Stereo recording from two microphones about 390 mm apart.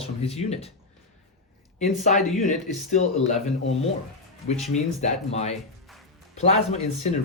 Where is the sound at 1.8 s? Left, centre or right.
Centre.